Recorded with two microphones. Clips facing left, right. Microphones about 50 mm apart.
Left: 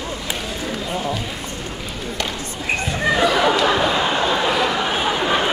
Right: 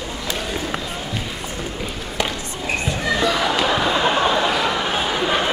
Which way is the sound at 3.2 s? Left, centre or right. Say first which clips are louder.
Left 3 dB; centre.